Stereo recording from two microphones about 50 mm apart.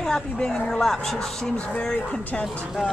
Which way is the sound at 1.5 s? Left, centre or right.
Left.